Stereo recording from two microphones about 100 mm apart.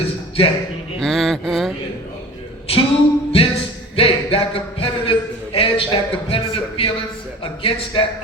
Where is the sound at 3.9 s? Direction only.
70° left (ahead or behind).